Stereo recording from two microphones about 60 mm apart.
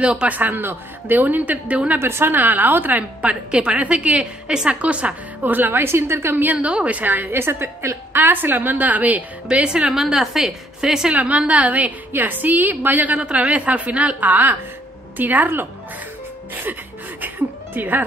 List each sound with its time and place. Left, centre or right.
0.0 s a woman's voice: centre
0.4 s a woman's voice: right
2.0 s a woman's voice: right; by 5.1 s centre
5.4 s a woman's voice: right
6.3 s a woman's voice: right
8.2 s a woman's voice: right; by 11.1 s centre
11.1 s a woman's voice: right
17.2 s music: right